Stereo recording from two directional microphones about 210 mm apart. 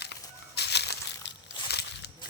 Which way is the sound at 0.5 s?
55° left (ahead or behind).